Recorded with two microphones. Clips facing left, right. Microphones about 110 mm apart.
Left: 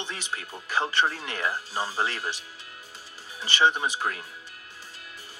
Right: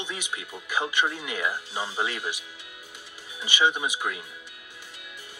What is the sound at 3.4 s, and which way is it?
Speech, 10° right (ahead or behind).